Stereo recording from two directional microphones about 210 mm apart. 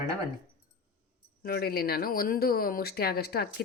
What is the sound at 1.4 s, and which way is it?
A woman's voice, 50° left (ahead or behind).